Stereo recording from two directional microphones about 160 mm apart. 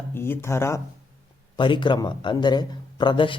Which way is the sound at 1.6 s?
30° left (ahead or behind).